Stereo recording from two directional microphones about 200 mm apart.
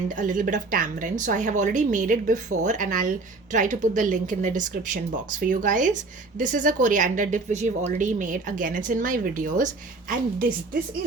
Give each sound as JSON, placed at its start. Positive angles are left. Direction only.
{"t": 0.1, "sound": "a woman's voice", "side_deg": -40}